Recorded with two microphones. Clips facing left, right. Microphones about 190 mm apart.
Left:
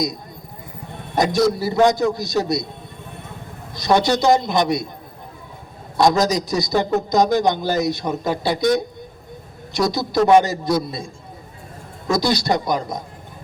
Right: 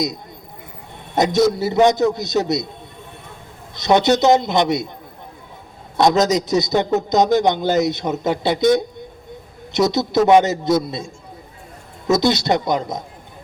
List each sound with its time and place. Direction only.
1.1 s a man's voice: 20° right (ahead or behind)
3.8 s a man's voice: 20° right (ahead or behind)
6.0 s a man's voice: 20° right (ahead or behind)
9.9 s a man's voice: 20° right (ahead or behind)